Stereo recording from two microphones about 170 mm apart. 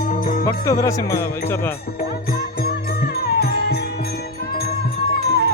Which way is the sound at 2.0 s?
60° left (ahead or behind).